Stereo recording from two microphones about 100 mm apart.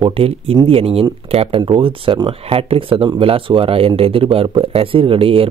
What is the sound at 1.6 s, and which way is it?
A man's voice, 60° right (ahead or behind).